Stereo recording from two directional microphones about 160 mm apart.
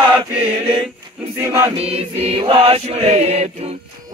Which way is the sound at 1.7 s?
40° right (ahead or behind).